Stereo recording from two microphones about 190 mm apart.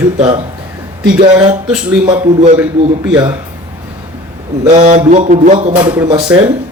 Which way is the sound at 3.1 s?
20° right (ahead or behind).